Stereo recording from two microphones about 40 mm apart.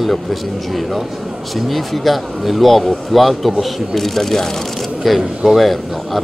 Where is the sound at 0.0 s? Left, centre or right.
Centre.